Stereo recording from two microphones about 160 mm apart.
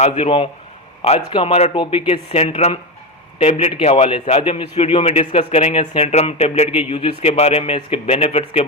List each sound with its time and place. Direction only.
0.0 s a man's voice: 35° left (ahead or behind)